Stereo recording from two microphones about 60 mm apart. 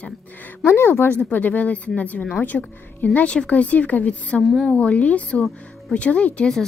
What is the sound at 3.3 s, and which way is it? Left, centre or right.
Speech, centre.